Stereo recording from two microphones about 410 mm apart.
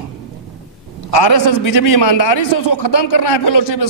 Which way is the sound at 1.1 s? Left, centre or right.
Left.